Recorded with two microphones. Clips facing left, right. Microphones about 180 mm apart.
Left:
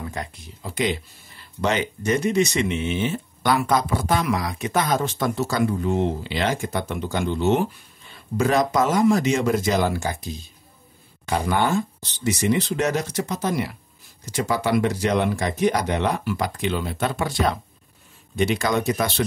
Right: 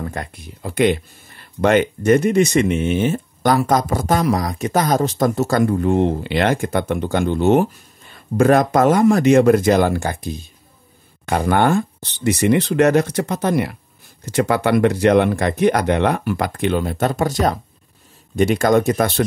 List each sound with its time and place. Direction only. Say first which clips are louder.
0.0 s speech: right 4 dB; 55° right (ahead or behind)